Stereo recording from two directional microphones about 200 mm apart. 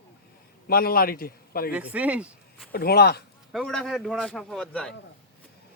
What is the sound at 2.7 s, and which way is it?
Speech, 50° left (ahead or behind).